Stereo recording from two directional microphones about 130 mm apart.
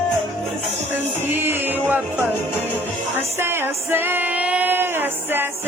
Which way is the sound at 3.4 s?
20° right (ahead or behind).